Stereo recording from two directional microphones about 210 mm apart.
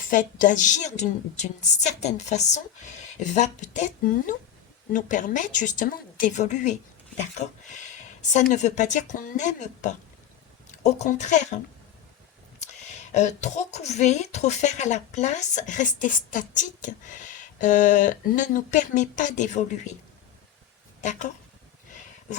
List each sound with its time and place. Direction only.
0.0 s a woman's voice: 40° left (ahead or behind)
21.0 s a woman's voice: 35° left (ahead or behind)